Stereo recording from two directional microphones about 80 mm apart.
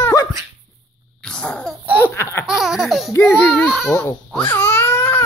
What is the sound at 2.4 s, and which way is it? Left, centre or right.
Laughter, centre.